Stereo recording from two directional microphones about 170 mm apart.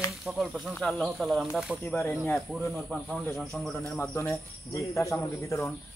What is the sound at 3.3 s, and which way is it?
Speech, 5° left (ahead or behind).